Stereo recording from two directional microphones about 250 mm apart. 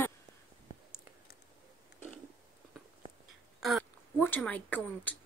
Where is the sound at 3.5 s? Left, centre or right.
Centre.